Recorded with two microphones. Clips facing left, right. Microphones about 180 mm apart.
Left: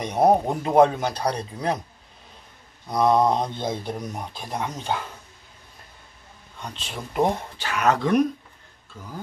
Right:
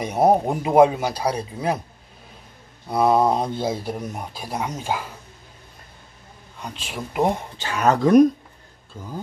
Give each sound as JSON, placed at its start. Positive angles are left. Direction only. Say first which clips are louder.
{"t": 0.0, "sound": "speech", "louder": "right 1 dB", "side_deg": -5}
{"t": 2.9, "sound": "speech", "louder": "right 1 dB", "side_deg": -5}
{"t": 6.6, "sound": "speech", "louder": "right 3 dB", "side_deg": -5}
{"t": 7.5, "sound": "speech", "louder": "right 2 dB", "side_deg": -30}